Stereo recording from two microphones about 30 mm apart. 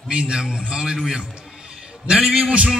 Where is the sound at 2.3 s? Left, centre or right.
Right.